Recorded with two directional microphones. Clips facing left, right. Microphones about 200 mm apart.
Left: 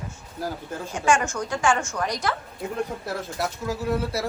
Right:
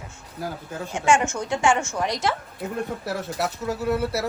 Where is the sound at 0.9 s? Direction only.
20° right (ahead or behind).